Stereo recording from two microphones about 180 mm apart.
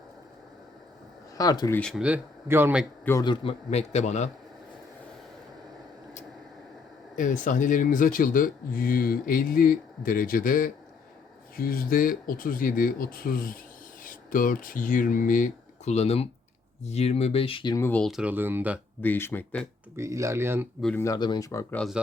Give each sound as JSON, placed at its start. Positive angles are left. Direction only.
{"t": 1.4, "sound": "speech", "side_deg": 20}
{"t": 1.8, "sound": "speech", "side_deg": 0}
{"t": 3.0, "sound": "a man's voice", "side_deg": 15}
{"t": 3.2, "sound": "speech", "side_deg": 35}
{"t": 7.2, "sound": "speech", "side_deg": 45}
{"t": 17.8, "sound": "speech", "side_deg": 5}
{"t": 19.0, "sound": "speech", "side_deg": 10}
{"t": 20.0, "sound": "speech", "side_deg": -15}
{"t": 21.0, "sound": "speech", "side_deg": 20}
{"t": 21.8, "sound": "speech", "side_deg": 0}